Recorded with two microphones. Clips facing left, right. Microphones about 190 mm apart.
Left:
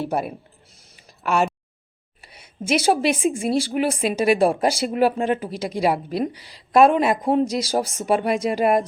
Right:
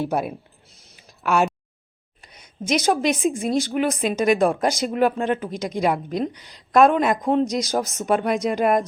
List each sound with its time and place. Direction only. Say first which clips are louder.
0.0 s a woman's voice: right 1 dB; centre (ahead or behind)
0.9 s a sound: right 1 dB; centre (ahead or behind)
2.2 s a woman's voice: left 1 dB; 5° left (ahead or behind)